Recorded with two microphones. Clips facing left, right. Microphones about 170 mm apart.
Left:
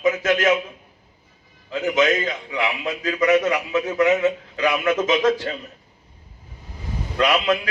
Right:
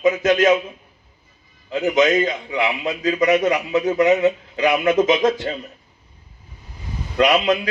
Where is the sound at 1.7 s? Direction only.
25° right (ahead or behind).